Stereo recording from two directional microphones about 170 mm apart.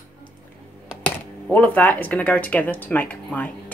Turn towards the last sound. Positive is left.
turn(degrees=10)  # may be behind; listen again after turning